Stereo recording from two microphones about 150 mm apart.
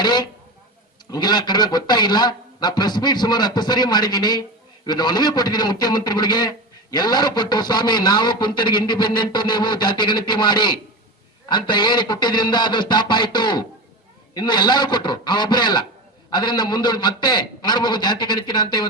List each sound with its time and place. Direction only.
0.0 s a man's voice: 30° left (ahead or behind)